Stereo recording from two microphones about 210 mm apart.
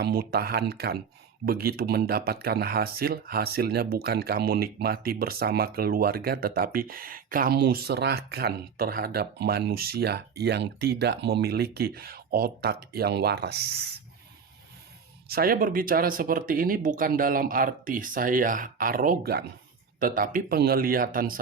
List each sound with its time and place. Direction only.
0.0 s speech: 45° right (ahead or behind)
15.3 s speech: 45° right (ahead or behind)